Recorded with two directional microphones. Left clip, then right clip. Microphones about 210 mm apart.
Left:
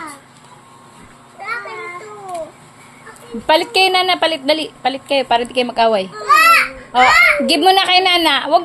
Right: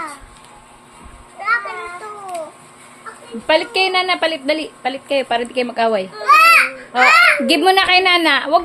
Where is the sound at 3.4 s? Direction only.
15° left (ahead or behind).